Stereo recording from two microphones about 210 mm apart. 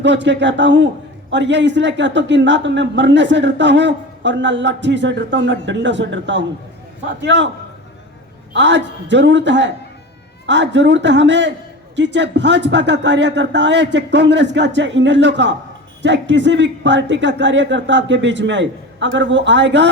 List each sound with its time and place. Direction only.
0.0 s speech: 60° right (ahead or behind)
8.5 s speech: 60° right (ahead or behind)